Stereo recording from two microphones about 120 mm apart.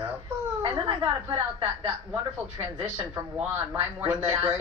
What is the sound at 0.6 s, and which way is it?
Speech, 40° right (ahead or behind).